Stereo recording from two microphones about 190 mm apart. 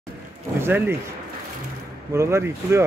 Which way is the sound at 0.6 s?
10° right (ahead or behind).